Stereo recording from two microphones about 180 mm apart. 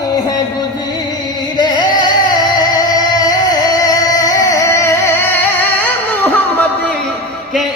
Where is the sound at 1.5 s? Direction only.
25° left (ahead or behind); by 6.9 s 10° left (ahead or behind).